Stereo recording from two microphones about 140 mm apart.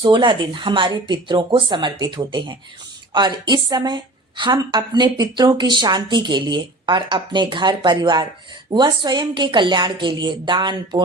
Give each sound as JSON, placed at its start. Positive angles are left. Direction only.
{"t": 0.0, "sound": "a woman's voice", "side_deg": -35}